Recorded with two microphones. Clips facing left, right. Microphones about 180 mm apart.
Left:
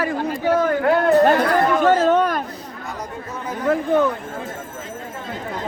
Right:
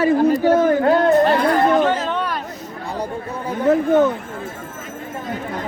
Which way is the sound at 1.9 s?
45° left (ahead or behind).